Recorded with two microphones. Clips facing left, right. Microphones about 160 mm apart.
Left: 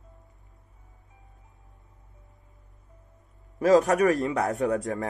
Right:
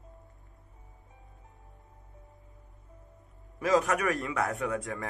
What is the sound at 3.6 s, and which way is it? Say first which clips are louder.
A man's voice: left 7 dB; 40° left (ahead or behind).